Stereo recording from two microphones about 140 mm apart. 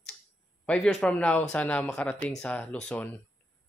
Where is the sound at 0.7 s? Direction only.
5° left (ahead or behind).